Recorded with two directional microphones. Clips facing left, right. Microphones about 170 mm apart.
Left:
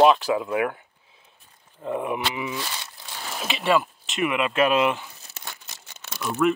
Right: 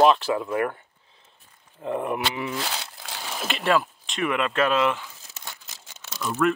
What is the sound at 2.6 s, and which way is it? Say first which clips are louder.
Crumpling: right 2 dB; 90° right.